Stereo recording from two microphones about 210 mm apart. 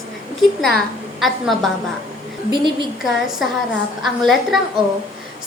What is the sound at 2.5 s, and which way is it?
Speech, 20° right (ahead or behind).